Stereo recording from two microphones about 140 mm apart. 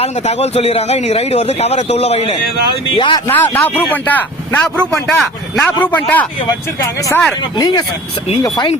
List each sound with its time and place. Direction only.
0.0 s a man's voice: 50° left (ahead or behind)
3.2 s speech: 15° left (ahead or behind)
7.6 s speech: 30° left (ahead or behind)